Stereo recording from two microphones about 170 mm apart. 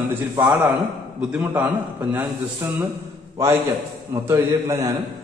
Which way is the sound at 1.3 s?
10° right (ahead or behind).